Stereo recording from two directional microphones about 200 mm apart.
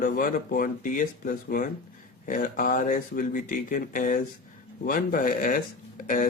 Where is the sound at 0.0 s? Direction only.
45° left (ahead or behind).